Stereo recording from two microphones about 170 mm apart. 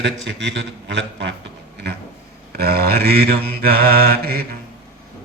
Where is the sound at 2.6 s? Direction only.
65° right (ahead or behind).